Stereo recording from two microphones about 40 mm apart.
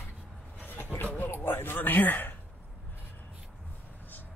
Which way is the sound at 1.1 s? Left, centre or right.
Left.